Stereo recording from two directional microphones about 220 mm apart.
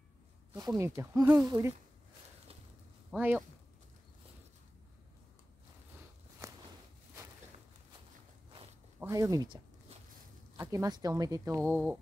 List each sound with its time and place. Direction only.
0.6 s speech: 15° right (ahead or behind)
3.1 s speech: 5° right (ahead or behind)
6.4 s walk: 15° right (ahead or behind)
9.0 s speech: 15° right (ahead or behind)
11.7 s a sound: 5° right (ahead or behind)